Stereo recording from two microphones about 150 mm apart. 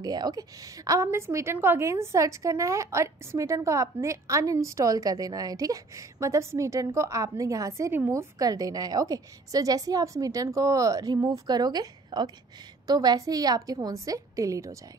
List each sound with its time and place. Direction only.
0.0 s a woman's voice: 25° right (ahead or behind)